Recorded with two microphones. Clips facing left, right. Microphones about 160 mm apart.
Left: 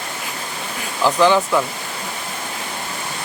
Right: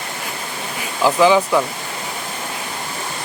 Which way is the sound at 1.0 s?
5° right (ahead or behind).